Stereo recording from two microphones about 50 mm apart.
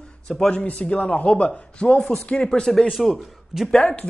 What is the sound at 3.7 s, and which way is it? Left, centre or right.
Speech, left.